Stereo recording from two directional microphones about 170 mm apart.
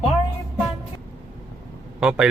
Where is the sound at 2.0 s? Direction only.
5° right (ahead or behind).